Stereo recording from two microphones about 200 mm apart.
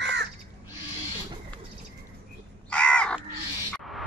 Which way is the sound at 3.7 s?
Centre (ahead or behind).